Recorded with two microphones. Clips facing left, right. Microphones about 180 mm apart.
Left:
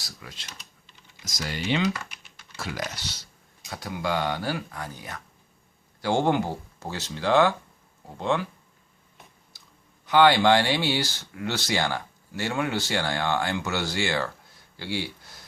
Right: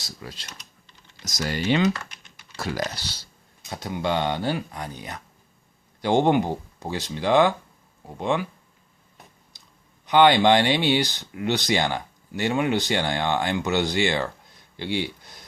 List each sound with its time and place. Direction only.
0.2 s speech: 35° right (ahead or behind)
1.9 s typing: 10° left (ahead or behind)
2.6 s speech: 35° right (ahead or behind); by 8.4 s 15° right (ahead or behind)
9.5 s clicking: 20° right (ahead or behind)
10.1 s speech: 20° right (ahead or behind)